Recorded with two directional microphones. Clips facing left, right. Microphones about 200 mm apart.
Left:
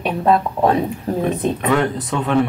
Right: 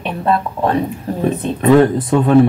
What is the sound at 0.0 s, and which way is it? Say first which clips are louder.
Speech: left 1 dB; 10° left (ahead or behind).